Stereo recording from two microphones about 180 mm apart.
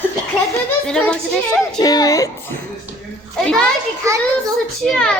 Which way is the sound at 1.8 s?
20° left (ahead or behind).